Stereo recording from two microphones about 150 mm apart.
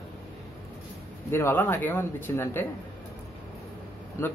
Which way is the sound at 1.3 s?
15° left (ahead or behind).